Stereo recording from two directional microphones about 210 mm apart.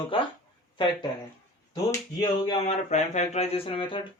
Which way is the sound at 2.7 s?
35° left (ahead or behind).